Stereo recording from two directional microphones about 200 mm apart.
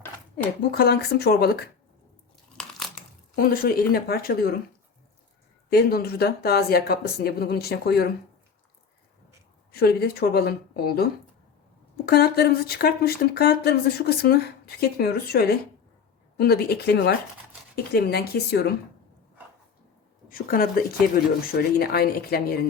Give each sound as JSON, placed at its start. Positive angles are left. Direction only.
{"t": 0.7, "sound": "speech", "side_deg": 50}
{"t": 2.6, "sound": "crunch", "side_deg": 0}
{"t": 3.3, "sound": "speech", "side_deg": 45}
{"t": 5.7, "sound": "speech", "side_deg": 50}
{"t": 9.7, "sound": "speech", "side_deg": 50}
{"t": 20.3, "sound": "speech", "side_deg": 45}